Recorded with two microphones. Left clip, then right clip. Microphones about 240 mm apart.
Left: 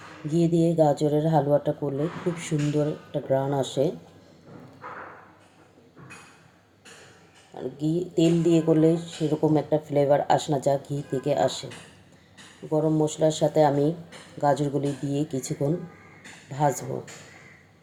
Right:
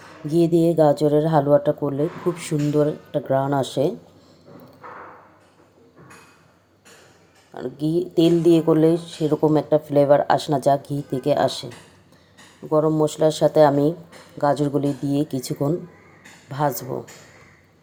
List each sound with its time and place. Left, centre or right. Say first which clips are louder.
0.3 s speech: right 5 dB; right
7.5 s speech: right 5 dB; right
12.7 s speech: right 5 dB; right